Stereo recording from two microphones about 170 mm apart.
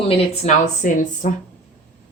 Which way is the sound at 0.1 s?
45° left (ahead or behind).